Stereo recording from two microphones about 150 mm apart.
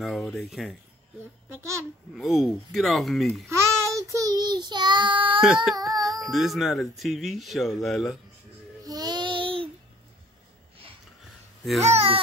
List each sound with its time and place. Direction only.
0.0 s speech: centre (ahead or behind)
1.5 s a child's voice: 20° right (ahead or behind)
2.1 s speech: centre (ahead or behind)
3.4 s child singing: 20° right (ahead or behind)
5.4 s speech: 5° right (ahead or behind)
8.8 s child singing: 25° right (ahead or behind)
11.8 s speech: 45° right (ahead or behind)